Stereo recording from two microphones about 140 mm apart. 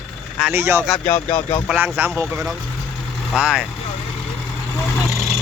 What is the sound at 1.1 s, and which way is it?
Speech, 45° left (ahead or behind).